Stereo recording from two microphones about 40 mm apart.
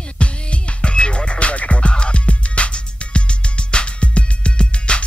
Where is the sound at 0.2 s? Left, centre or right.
Left.